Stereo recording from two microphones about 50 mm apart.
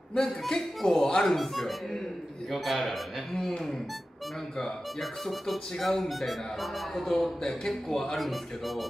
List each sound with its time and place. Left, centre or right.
0.1 s speech: centre
5.2 s speech: centre